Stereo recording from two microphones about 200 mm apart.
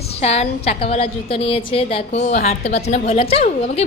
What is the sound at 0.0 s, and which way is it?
A woman's voice, 30° left (ahead or behind).